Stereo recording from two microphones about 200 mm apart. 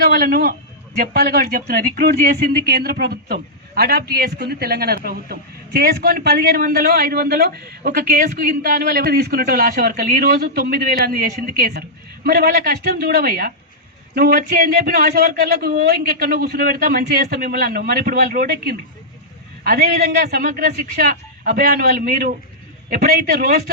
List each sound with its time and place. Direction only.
0.0 s speech: 50° right (ahead or behind)